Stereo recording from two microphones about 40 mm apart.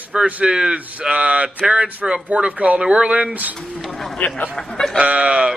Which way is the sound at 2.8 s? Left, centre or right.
Right.